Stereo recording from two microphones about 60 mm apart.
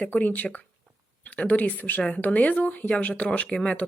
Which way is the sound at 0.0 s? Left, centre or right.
Left.